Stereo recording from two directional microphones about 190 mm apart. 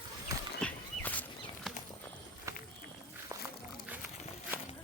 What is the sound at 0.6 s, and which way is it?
Horse, 10° left (ahead or behind).